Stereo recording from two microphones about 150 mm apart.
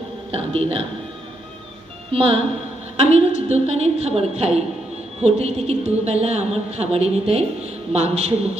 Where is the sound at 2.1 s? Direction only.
40° right (ahead or behind).